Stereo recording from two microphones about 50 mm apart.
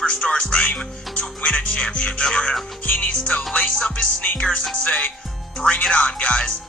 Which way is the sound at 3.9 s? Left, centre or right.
Left.